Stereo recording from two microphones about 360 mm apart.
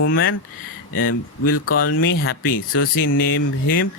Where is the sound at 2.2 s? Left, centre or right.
Left.